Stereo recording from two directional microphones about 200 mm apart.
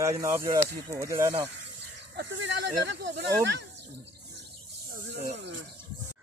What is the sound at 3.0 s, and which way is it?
Speech, 60° right (ahead or behind).